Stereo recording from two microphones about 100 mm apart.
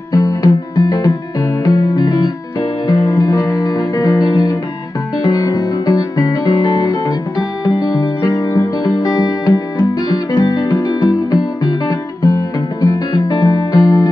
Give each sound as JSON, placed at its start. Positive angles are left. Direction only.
{"t": 0.1, "sound": "music", "side_deg": 35}